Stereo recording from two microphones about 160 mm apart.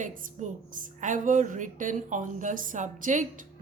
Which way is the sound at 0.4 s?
50° right (ahead or behind).